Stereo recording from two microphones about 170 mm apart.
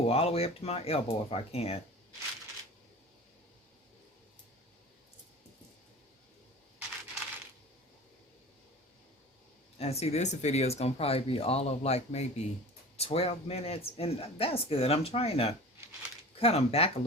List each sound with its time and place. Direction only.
0.1 s speech: 35° left (ahead or behind)
9.7 s speech: 35° left (ahead or behind)